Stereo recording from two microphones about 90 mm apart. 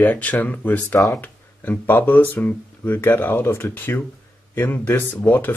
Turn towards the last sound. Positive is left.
turn(degrees=20)  # may be behind; listen again after turning